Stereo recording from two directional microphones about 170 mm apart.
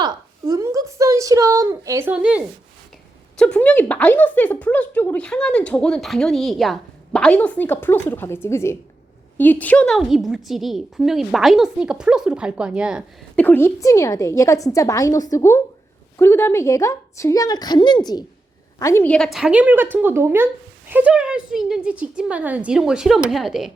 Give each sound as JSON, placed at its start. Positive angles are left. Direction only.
{"t": 0.0, "sound": "a sound", "side_deg": -20}
{"t": 3.3, "sound": "a woman's voice", "side_deg": 5}
{"t": 13.3, "sound": "a woman's voice", "side_deg": 10}